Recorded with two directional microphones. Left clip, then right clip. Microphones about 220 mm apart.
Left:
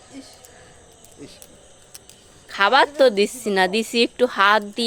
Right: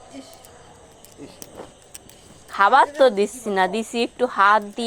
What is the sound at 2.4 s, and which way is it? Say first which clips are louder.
A woman's voice: right 1 dB; 20° left (ahead or behind).